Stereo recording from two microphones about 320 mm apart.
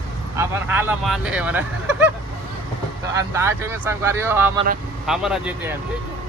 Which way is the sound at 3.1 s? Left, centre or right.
Centre.